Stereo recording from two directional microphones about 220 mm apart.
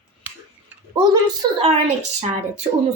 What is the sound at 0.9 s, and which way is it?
A woman's voice, 20° right (ahead or behind).